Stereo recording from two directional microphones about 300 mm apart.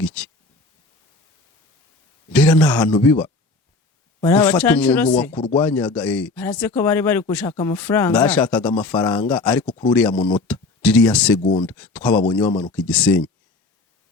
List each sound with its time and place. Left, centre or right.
0.0 s a sound: centre
2.3 s speech: centre
5.4 s speech: centre
5.6 s speech: centre